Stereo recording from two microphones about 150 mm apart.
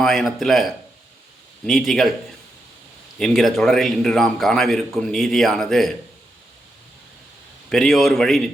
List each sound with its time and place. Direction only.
0.0 s a man's voice: centre (ahead or behind)
3.2 s a man's voice: 5° left (ahead or behind)
7.7 s a man's voice: centre (ahead or behind)